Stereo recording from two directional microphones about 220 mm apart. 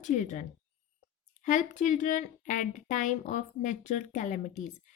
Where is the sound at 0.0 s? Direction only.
35° left (ahead or behind).